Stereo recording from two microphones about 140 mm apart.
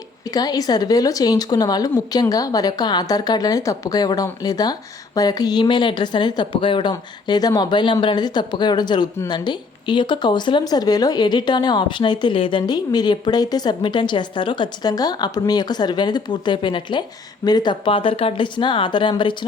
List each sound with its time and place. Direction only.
0.3 s a woman's voice: 30° left (ahead or behind)